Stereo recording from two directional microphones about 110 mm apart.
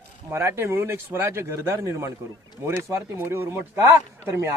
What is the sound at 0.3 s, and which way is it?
A man's voice, 25° right (ahead or behind).